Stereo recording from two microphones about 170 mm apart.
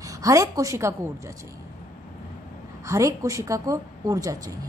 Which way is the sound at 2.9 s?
20° right (ahead or behind).